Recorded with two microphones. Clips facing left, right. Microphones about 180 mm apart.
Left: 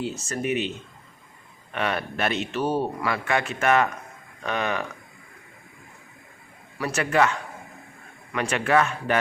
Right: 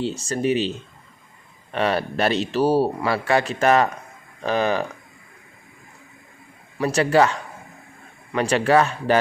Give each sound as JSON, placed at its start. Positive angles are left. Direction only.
{"t": 0.0, "sound": "speech", "side_deg": -30}
{"t": 1.7, "sound": "speech", "side_deg": -30}
{"t": 6.7, "sound": "speech", "side_deg": -30}